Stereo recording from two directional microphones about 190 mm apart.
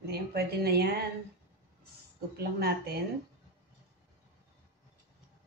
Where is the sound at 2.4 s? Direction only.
55° right (ahead or behind).